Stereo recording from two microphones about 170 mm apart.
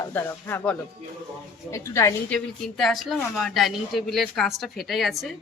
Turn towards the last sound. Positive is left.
turn(degrees=0)  # may be behind; listen again after turning